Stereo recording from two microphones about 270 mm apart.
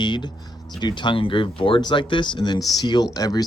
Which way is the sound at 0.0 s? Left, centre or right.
Centre.